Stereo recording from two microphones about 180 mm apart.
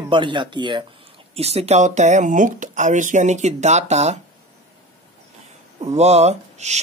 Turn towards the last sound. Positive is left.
turn(degrees=-40)  # may be behind; listen again after turning